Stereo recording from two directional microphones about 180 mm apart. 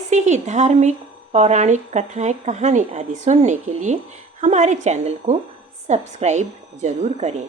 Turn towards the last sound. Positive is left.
turn(degrees=-40)  # may be behind; listen again after turning